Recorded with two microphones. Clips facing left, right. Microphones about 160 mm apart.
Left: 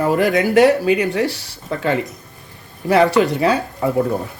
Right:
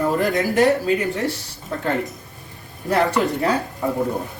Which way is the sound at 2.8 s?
80° left.